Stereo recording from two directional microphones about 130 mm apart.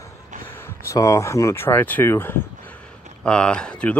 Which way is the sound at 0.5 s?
20° left (ahead or behind).